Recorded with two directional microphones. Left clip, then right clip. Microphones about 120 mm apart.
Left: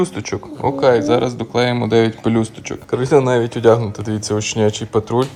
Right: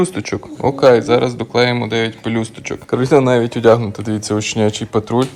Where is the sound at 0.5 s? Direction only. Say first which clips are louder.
Right 3 dB; 5° left (ahead or behind).